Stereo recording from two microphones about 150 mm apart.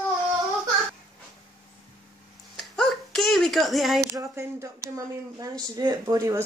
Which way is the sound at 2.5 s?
5° left (ahead or behind).